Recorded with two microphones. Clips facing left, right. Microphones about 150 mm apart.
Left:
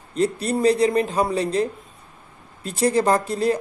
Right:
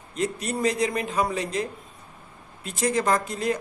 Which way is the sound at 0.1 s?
35° left (ahead or behind).